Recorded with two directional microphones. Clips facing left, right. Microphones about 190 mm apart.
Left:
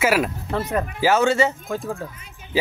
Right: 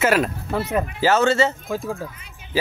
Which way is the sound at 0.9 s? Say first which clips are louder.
Even; 10° left (ahead or behind).